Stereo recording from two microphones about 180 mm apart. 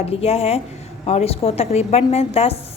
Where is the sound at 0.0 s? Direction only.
35° left (ahead or behind).